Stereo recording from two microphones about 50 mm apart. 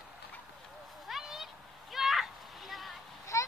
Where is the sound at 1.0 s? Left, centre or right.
Centre.